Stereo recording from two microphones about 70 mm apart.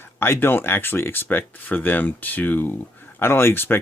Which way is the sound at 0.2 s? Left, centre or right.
Left.